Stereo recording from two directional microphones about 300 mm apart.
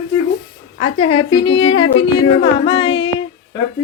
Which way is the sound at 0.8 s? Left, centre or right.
Centre.